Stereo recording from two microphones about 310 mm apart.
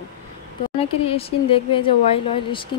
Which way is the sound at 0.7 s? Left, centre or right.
Centre.